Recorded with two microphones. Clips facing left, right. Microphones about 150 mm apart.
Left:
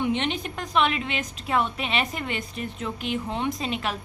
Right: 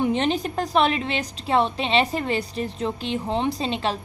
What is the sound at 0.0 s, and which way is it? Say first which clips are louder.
A woman's voice: right 4 dB; 35° right (ahead or behind).